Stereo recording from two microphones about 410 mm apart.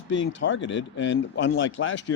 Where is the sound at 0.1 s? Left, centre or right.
Left.